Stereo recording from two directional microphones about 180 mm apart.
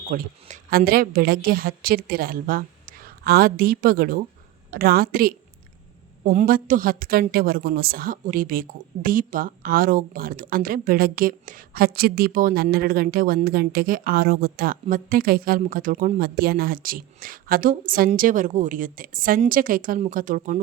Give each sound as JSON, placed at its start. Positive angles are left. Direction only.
{"t": 0.1, "sound": "a woman's voice", "side_deg": -45}
{"t": 6.3, "sound": "a woman's voice", "side_deg": -50}